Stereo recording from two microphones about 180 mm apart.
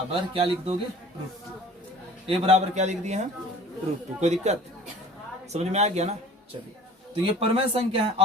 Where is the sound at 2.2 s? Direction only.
40° right (ahead or behind).